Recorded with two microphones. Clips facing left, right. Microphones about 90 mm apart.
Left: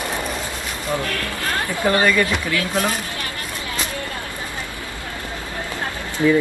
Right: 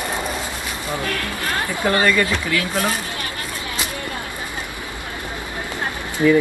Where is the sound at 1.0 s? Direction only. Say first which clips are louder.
Even; 20° right (ahead or behind).